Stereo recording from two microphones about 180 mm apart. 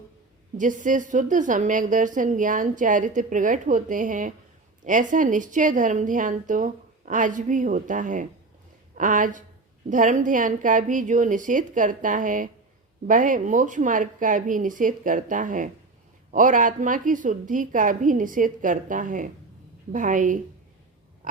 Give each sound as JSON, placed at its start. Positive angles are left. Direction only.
{"t": 0.5, "sound": "a woman's voice", "side_deg": -45}